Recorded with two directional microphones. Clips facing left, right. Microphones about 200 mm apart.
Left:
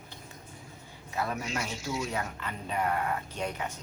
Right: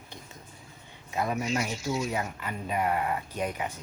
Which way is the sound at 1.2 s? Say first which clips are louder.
Right 4 dB; 15° right (ahead or behind).